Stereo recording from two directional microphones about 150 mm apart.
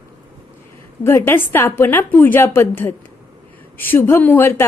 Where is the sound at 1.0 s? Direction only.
15° left (ahead or behind).